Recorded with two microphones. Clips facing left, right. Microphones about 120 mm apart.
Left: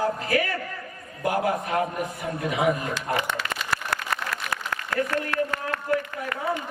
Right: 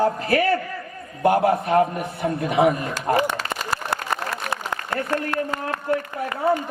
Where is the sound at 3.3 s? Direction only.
35° right (ahead or behind).